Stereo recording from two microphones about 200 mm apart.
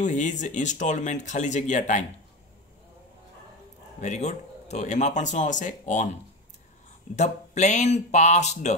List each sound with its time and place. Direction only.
0.0 s speech: 40° left (ahead or behind)
4.0 s speech: 35° left (ahead or behind)
7.2 s speech: 35° left (ahead or behind)